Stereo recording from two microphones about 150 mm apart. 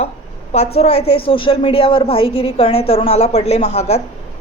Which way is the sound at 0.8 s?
40° left (ahead or behind).